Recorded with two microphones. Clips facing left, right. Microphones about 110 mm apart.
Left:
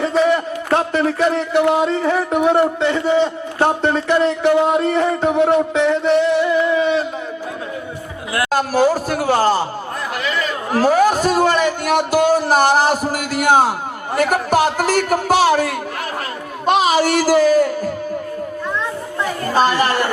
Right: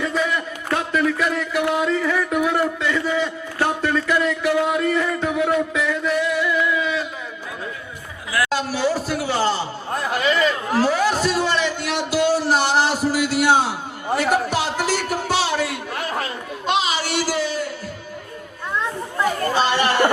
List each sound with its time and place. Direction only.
0.0 s speech: 30° left (ahead or behind)
8.4 s speech: 45° left (ahead or behind)
10.7 s a sound: 45° left (ahead or behind)
14.2 s a man's voice: 50° left (ahead or behind)
16.6 s music: 45° left (ahead or behind)
19.5 s speech: 45° left (ahead or behind)